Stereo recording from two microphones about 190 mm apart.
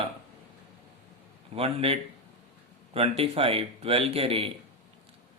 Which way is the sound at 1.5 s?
30° right (ahead or behind).